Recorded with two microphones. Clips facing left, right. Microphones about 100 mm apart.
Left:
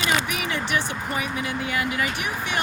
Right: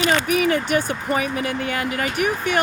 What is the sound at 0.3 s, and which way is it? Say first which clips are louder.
Speech: right 8 dB; 45° right (ahead or behind).